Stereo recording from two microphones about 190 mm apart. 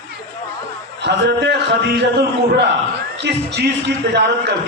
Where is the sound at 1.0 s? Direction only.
65° right (ahead or behind).